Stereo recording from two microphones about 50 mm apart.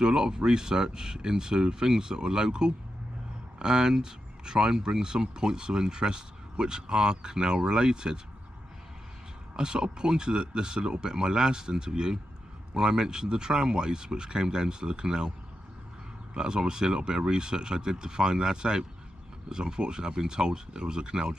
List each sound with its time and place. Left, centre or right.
0.0 s speech: centre
9.6 s speech: centre
16.3 s speech: centre